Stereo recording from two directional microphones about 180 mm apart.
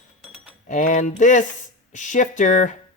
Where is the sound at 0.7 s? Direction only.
45° left (ahead or behind).